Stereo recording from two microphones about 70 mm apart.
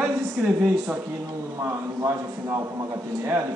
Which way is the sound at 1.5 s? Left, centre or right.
Right.